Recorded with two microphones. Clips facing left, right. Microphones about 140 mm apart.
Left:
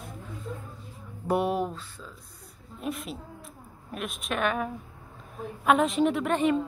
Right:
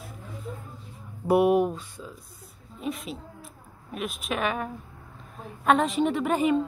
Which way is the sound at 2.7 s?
Centre (ahead or behind).